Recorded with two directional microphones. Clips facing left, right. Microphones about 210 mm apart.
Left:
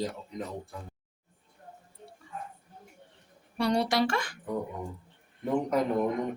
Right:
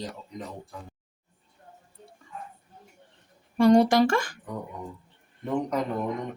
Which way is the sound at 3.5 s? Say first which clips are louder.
Right 8 dB; 50° right (ahead or behind).